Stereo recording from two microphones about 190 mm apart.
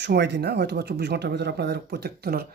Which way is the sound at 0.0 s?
60° right (ahead or behind).